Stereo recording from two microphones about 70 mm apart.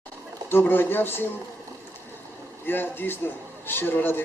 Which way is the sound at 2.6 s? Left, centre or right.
Left.